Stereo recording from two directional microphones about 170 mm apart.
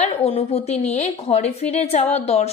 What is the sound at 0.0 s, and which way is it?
Speech, 35° left (ahead or behind).